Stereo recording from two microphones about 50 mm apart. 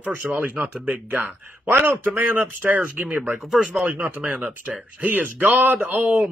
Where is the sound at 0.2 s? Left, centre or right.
Right.